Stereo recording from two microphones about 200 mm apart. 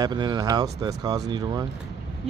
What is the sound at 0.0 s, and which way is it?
Speech, 20° right (ahead or behind).